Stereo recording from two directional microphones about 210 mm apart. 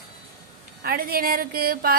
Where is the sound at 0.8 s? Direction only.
45° right (ahead or behind).